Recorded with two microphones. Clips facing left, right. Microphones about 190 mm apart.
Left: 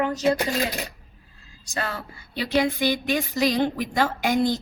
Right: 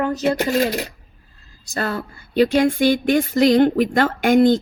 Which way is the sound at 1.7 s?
40° right (ahead or behind).